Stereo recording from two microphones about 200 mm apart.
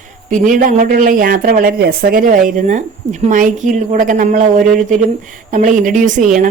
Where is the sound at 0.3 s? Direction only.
40° right (ahead or behind).